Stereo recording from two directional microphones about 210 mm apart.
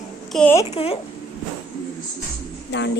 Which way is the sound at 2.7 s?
55° left (ahead or behind).